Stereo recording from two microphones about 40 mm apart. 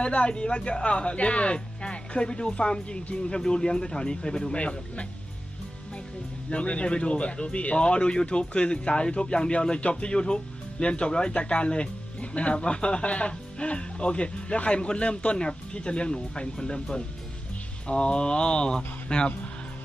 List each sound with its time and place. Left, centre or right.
0.0 s speech: left
4.5 s speech: left
6.5 s speech: left